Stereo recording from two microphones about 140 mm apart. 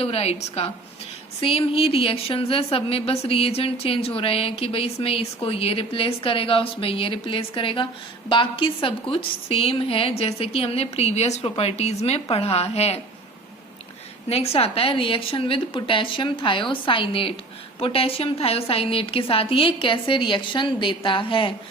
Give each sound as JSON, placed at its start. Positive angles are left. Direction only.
{"t": 0.0, "sound": "a woman's voice", "side_deg": 45}
{"t": 14.3, "sound": "a woman's voice", "side_deg": 45}